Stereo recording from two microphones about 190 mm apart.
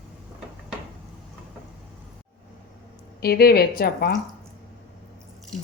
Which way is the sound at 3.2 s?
55° left (ahead or behind).